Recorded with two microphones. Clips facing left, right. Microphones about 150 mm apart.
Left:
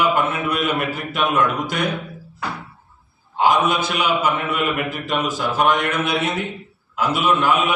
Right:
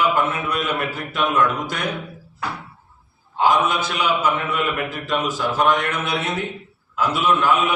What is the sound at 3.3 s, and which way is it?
A man's voice, 15° left (ahead or behind).